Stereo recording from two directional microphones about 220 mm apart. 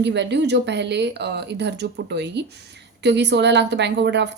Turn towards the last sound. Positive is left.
turn(degrees=-50)  # may be behind; listen again after turning